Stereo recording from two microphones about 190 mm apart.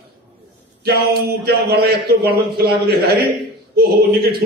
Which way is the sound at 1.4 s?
55° right (ahead or behind).